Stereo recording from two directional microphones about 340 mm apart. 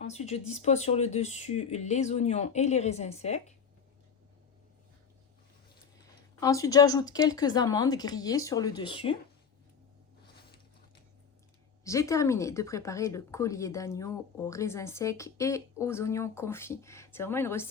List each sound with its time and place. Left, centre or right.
0.0 s speech: centre
6.4 s speech: centre
11.9 s speech: centre